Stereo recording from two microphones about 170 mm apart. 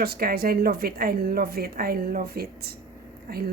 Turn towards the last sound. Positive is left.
turn(degrees=-65)  # may be behind; listen again after turning